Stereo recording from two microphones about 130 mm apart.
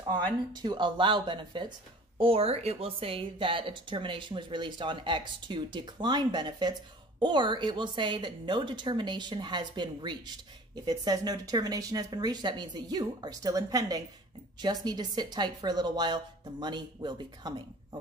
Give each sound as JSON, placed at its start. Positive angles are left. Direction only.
{"t": 0.0, "sound": "a woman's voice", "side_deg": -35}